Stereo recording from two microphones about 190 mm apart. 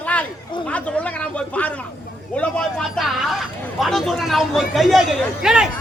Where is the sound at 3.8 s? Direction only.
Centre (ahead or behind).